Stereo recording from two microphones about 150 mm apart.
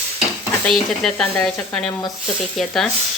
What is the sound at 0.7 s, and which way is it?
Speech, centre (ahead or behind).